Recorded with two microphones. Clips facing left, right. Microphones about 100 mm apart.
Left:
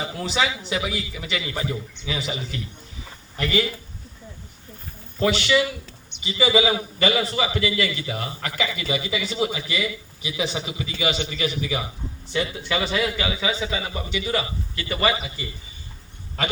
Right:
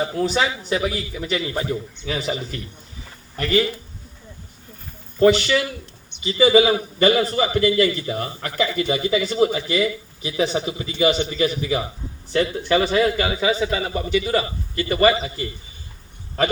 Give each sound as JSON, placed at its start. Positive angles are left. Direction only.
{"t": 0.0, "sound": "a man's voice", "side_deg": -40}
{"t": 5.2, "sound": "a man's voice", "side_deg": -40}